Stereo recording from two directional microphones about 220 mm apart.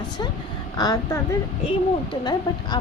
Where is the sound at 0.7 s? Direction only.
15° left (ahead or behind).